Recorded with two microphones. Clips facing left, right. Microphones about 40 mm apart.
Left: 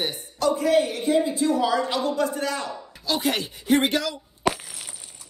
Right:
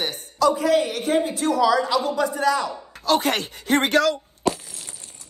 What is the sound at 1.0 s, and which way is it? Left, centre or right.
Speech, right.